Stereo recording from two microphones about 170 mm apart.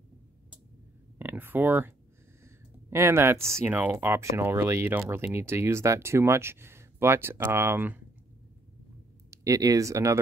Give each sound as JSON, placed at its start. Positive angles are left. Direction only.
{"t": 1.1, "sound": "a sound", "side_deg": -10}
{"t": 2.4, "sound": "speech", "side_deg": -15}
{"t": 9.3, "sound": "speech", "side_deg": -20}